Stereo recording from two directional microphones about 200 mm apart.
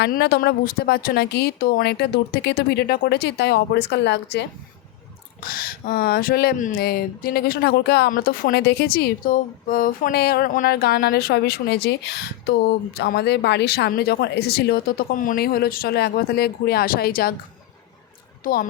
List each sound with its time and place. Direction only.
0.0 s speech: 55° left (ahead or behind)
5.4 s speech: 45° left (ahead or behind)
18.4 s speech: 45° left (ahead or behind)